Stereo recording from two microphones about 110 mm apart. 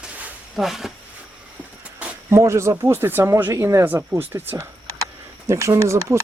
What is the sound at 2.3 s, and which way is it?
Speech, 25° right (ahead or behind).